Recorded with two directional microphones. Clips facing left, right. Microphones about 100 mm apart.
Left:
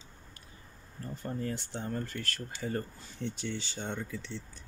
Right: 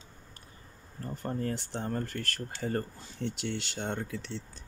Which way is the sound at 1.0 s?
50° right (ahead or behind).